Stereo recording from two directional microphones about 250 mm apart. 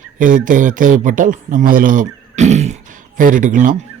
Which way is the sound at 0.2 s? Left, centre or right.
Right.